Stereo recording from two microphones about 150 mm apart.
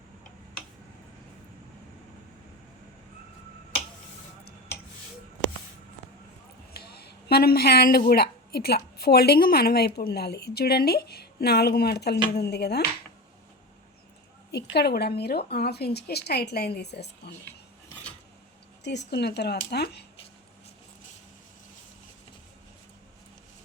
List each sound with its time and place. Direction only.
6.7 s a woman's voice: 90° left
14.5 s a woman's voice: 90° left
19.1 s a woman's voice: 90° left